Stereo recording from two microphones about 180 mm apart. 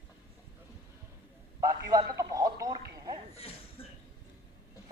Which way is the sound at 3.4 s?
30° left (ahead or behind).